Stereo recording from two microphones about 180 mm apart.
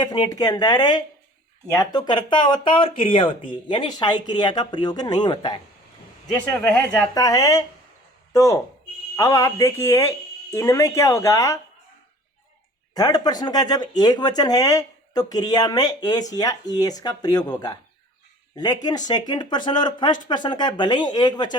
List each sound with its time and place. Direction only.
0.0 s speech: 25° left (ahead or behind)
6.4 s speech: 5° left (ahead or behind)
7.1 s speech: 20° left (ahead or behind)
12.9 s speech: 20° left (ahead or behind)